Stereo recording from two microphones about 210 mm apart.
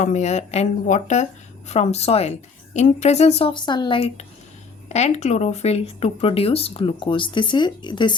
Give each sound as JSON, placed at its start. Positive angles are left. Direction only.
{"t": 0.0, "sound": "a woman's voice", "side_deg": 35}